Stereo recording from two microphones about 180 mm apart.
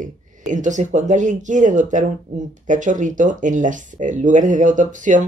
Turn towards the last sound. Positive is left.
turn(degrees=-45)  # may be behind; listen again after turning